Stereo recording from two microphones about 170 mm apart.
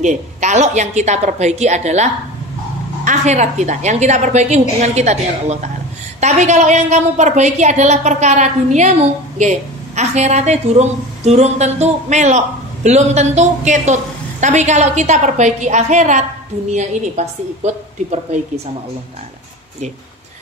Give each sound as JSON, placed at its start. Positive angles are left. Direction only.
{"t": 0.0, "sound": "a woman's voice", "side_deg": -45}
{"t": 3.1, "sound": "a woman's voice", "side_deg": -45}